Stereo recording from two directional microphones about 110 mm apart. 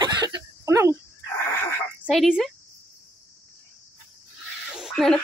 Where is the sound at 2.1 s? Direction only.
Centre (ahead or behind).